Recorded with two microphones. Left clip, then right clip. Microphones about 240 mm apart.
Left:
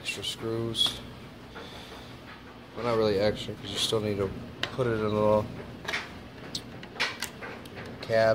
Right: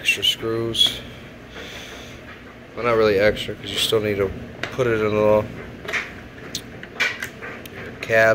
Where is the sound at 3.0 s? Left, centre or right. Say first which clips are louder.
Right 9 dB; centre.